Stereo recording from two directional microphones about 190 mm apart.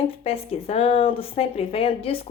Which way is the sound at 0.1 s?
30° left (ahead or behind).